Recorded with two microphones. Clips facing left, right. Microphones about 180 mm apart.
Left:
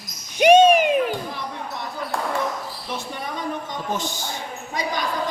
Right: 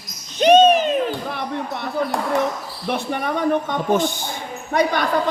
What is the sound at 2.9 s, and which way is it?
A man's voice, 65° right (ahead or behind).